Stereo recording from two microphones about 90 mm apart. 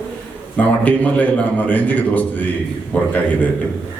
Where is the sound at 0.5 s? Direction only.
15° left (ahead or behind).